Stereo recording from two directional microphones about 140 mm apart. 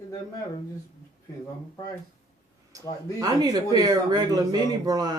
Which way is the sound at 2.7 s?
25° right (ahead or behind).